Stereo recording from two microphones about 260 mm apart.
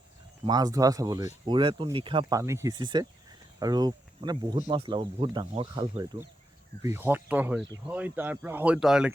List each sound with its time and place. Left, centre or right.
0.4 s speech: centre